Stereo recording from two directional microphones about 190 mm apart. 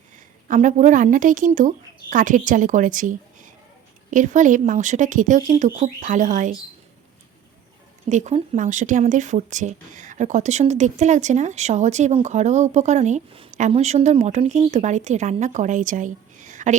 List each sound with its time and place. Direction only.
0.4 s speech: 40° right (ahead or behind)
8.1 s speech: 40° right (ahead or behind)